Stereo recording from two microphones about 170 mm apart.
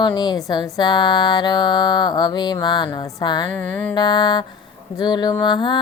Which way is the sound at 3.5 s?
10° left (ahead or behind).